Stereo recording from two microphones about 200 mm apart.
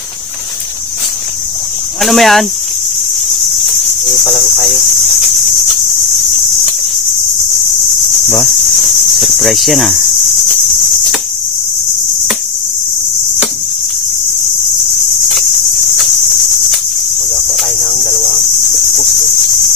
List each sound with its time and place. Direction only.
2.0 s speech: centre (ahead or behind)
3.6 s cricket: centre (ahead or behind)
9.2 s cricket: centre (ahead or behind)
17.6 s cricket: centre (ahead or behind)